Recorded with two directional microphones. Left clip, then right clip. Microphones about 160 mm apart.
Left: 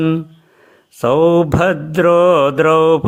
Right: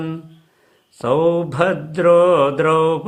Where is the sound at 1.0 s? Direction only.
35° left (ahead or behind).